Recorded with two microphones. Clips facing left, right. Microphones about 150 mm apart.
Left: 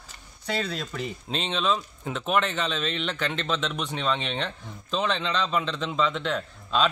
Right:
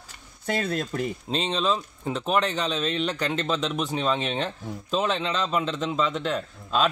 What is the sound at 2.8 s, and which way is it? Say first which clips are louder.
Speech: right 3 dB; 40° right (ahead or behind).